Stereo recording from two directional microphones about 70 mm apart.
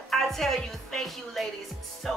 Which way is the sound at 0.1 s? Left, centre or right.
Centre.